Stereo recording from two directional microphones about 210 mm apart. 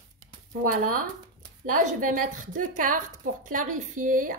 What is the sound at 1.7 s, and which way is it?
Speech, 40° right (ahead or behind).